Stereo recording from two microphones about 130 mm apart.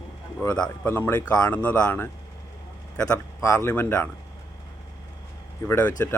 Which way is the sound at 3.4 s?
20° left (ahead or behind).